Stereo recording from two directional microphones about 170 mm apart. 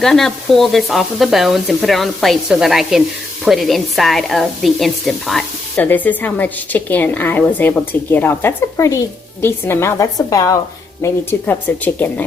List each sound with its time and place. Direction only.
0.0 s frying: centre (ahead or behind)
5.7 s a woman's voice: 10° left (ahead or behind)